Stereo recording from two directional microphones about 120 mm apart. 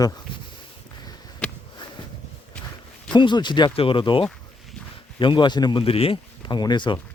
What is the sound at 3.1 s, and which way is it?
Speech, 40° left (ahead or behind).